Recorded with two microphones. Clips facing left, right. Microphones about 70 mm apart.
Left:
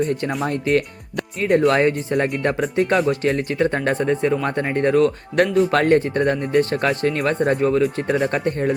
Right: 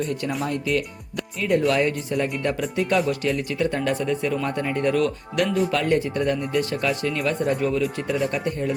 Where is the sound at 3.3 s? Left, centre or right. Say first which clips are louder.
Left 4 dB; left.